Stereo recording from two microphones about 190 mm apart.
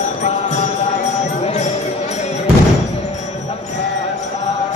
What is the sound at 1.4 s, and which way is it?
Music, 35° left (ahead or behind).